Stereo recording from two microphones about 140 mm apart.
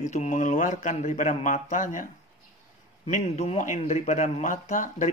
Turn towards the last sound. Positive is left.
turn(degrees=60)  # may be behind; listen again after turning